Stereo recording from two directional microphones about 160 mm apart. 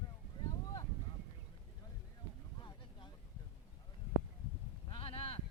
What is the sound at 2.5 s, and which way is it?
Boat, 30° left (ahead or behind).